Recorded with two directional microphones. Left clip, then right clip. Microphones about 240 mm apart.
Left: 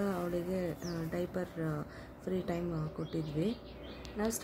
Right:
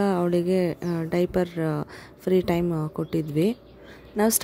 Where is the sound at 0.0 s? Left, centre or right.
Right.